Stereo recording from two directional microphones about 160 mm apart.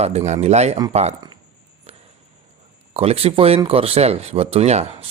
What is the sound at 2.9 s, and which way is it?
Speech, 40° right (ahead or behind).